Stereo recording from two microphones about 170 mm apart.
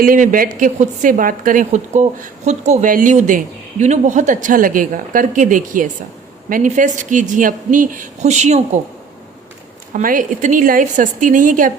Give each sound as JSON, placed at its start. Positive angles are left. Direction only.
{"t": 0.0, "sound": "a woman's voice", "side_deg": -50}
{"t": 9.9, "sound": "a woman's voice", "side_deg": -50}